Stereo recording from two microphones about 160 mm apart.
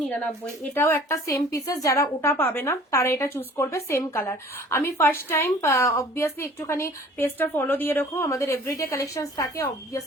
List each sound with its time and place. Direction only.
0.7 s a woman's voice: 15° left (ahead or behind)